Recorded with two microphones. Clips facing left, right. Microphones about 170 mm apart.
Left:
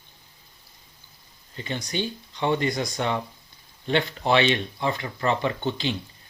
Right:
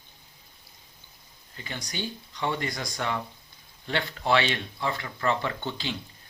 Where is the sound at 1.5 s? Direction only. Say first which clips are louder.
Left 7 dB; 25° left (ahead or behind).